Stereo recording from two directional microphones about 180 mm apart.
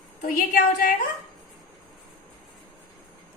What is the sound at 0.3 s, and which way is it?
Speech, 50° left (ahead or behind).